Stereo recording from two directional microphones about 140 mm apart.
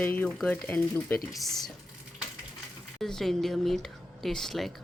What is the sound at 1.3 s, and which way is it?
Speech, centre (ahead or behind).